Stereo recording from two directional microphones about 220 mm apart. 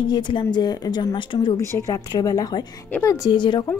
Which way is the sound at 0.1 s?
20° left (ahead or behind).